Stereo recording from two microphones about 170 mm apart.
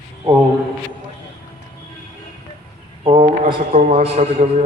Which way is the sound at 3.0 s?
35° right (ahead or behind).